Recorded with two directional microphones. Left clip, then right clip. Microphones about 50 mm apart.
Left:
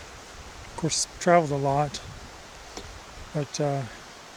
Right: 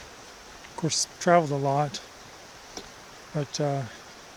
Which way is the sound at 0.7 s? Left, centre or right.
Right.